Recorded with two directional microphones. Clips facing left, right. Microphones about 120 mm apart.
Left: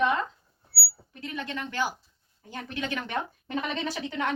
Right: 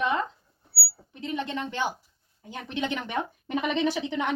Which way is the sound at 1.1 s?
20° right (ahead or behind).